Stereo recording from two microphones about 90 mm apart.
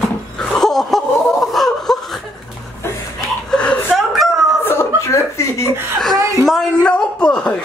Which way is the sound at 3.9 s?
5° right (ahead or behind).